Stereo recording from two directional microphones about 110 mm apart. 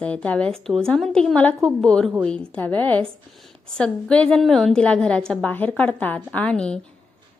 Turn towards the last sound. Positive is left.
turn(degrees=10)  # may be behind; listen again after turning